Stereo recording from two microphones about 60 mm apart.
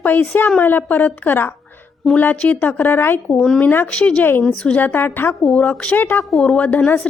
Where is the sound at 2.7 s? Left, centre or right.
Left.